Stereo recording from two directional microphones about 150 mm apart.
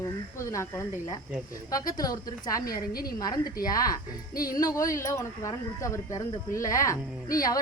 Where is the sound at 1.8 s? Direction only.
25° left (ahead or behind).